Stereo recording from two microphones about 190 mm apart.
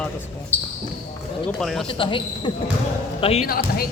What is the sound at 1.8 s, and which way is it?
Speech, 25° left (ahead or behind).